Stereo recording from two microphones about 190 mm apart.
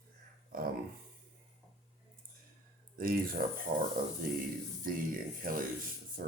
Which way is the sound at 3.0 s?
50° right (ahead or behind).